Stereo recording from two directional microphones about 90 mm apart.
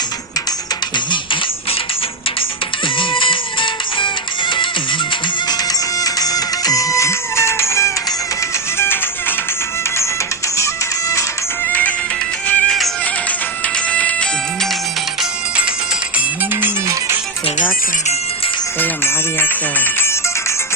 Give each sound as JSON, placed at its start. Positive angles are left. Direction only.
{"t": 0.9, "sound": "music", "side_deg": 60}
{"t": 2.8, "sound": "music", "side_deg": 70}
{"t": 6.0, "sound": "music", "side_deg": 45}
{"t": 11.7, "sound": "music", "side_deg": 20}
{"t": 13.7, "sound": "music", "side_deg": 15}
{"t": 15.2, "sound": "music", "side_deg": -10}
{"t": 16.1, "sound": "music", "side_deg": -20}
{"t": 18.8, "sound": "music", "side_deg": 25}